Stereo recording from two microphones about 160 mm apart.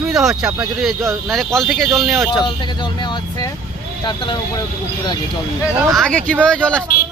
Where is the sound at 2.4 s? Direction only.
30° left (ahead or behind).